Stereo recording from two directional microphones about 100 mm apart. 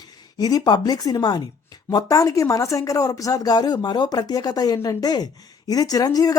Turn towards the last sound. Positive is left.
turn(degrees=40)  # may be behind; listen again after turning